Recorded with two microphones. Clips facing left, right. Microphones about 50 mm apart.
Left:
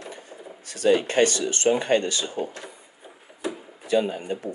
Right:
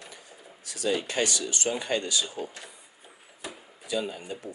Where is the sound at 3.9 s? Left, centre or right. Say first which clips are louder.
Left 8 dB; left.